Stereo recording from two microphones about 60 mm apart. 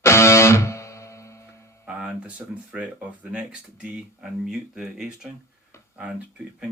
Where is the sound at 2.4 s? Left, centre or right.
Right.